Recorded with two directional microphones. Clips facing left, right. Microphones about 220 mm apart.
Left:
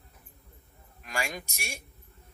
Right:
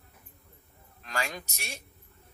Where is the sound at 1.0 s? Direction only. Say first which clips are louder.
Even; 10° left (ahead or behind).